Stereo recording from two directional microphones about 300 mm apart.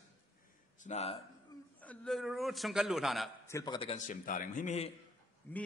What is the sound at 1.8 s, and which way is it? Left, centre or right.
A man's voice, centre.